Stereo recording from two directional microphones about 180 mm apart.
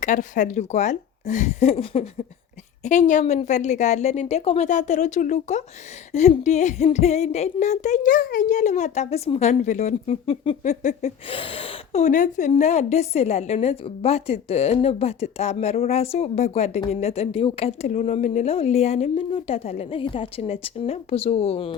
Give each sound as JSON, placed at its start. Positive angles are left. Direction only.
{"t": 0.0, "sound": "a woman's voice", "side_deg": 45}
{"t": 10.6, "sound": "a sound", "side_deg": 40}
{"t": 11.3, "sound": "a woman's voice", "side_deg": 30}